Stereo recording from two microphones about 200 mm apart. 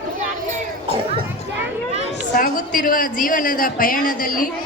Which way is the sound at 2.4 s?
45° left (ahead or behind).